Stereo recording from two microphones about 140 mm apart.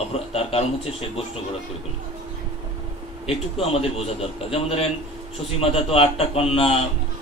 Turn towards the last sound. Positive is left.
turn(degrees=45)  # may be behind; listen again after turning